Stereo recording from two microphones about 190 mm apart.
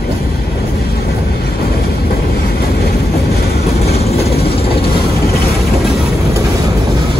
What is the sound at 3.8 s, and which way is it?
Vehicle, 35° left (ahead or behind).